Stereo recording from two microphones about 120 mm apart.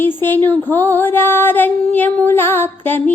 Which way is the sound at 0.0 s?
15° left (ahead or behind).